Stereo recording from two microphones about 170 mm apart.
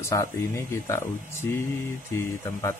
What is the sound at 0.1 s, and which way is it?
Speech, 20° left (ahead or behind).